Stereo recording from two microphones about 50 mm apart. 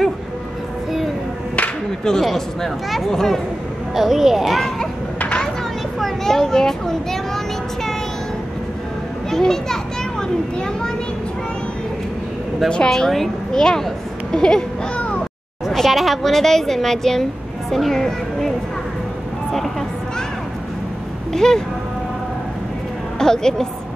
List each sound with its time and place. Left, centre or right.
2.0 s a child's voice: centre
5.9 s a sound: centre
9.3 s speech: centre
12.6 s speech: centre
15.0 s a sound: left
15.7 s a woman's voice: centre
21.3 s speech: centre
23.1 s speech: centre